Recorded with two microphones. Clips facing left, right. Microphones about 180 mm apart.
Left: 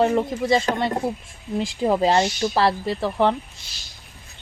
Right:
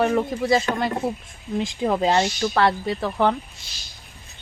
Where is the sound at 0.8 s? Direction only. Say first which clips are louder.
Left 1 dB; 25° left (ahead or behind).